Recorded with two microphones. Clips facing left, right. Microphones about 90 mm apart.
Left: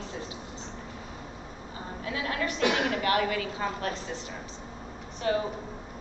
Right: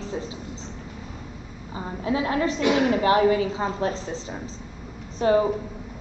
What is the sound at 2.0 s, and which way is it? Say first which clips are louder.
A woman's voice: right 8 dB; 25° right (ahead or behind).